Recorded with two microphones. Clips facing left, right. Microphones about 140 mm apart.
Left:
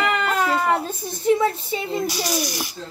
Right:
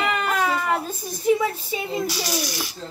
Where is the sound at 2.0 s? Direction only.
15° left (ahead or behind).